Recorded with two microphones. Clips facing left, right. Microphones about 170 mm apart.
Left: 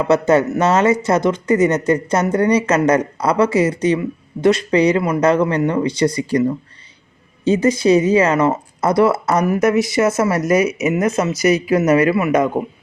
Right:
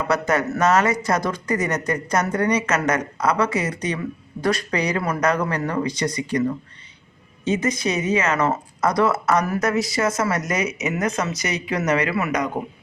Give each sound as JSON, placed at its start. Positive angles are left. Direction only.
{"t": 0.0, "sound": "a woman's voice", "side_deg": 25}